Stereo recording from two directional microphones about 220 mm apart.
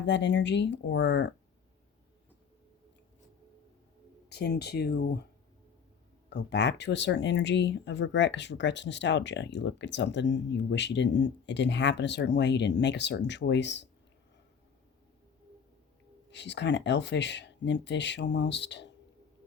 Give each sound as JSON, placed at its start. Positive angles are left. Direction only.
{"t": 0.0, "sound": "speech", "side_deg": 55}
{"t": 4.3, "sound": "speech", "side_deg": 50}
{"t": 6.3, "sound": "speech", "side_deg": 50}
{"t": 16.3, "sound": "speech", "side_deg": 50}